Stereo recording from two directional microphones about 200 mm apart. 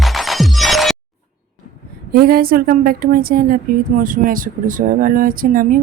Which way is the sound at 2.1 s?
50° right (ahead or behind).